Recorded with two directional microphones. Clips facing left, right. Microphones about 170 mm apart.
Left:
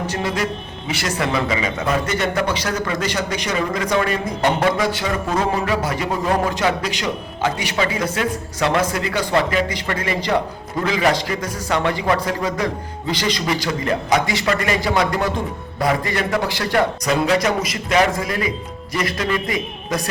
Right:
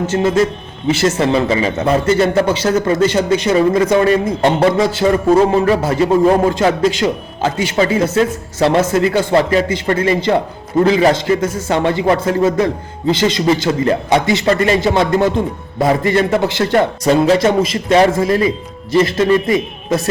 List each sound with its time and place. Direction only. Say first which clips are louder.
0.1 s a man's voice: right 9 dB; 25° right (ahead or behind)